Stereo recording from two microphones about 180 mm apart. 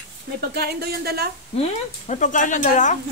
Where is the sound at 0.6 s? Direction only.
60° right (ahead or behind).